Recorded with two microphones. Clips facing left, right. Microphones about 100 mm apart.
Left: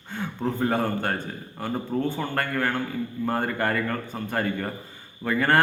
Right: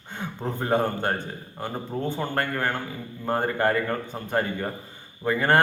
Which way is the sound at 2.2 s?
25° right (ahead or behind).